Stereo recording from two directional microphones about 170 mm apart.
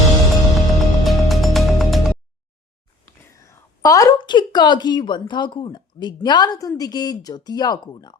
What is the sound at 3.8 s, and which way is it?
Speech, 20° left (ahead or behind).